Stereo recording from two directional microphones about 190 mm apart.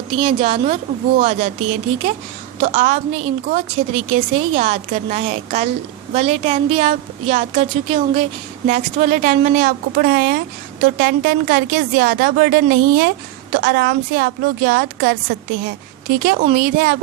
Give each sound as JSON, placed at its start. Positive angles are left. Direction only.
{"t": 0.1, "sound": "a woman's voice", "side_deg": -30}